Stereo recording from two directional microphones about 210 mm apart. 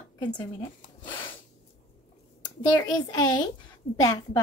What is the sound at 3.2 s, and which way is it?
A woman's voice, 20° left (ahead or behind).